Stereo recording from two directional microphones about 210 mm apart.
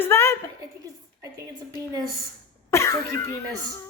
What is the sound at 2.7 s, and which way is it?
A woman's voice, 15° left (ahead or behind).